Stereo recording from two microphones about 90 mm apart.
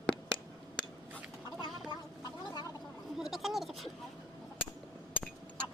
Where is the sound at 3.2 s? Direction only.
Centre (ahead or behind).